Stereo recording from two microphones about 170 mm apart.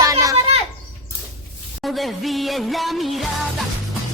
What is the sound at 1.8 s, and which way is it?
Music, centre (ahead or behind).